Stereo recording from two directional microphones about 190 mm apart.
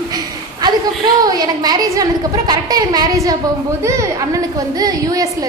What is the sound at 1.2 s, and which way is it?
A woman's voice, 20° right (ahead or behind).